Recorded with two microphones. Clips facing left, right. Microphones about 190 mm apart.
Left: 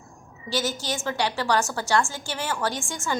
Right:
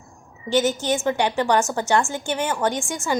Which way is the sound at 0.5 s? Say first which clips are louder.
Right 8 dB; 20° right (ahead or behind).